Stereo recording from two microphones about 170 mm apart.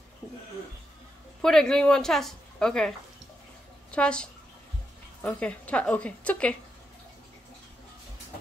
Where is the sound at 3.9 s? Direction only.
5° left (ahead or behind).